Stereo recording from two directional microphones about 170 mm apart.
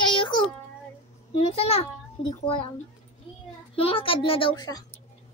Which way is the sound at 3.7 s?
35° left (ahead or behind).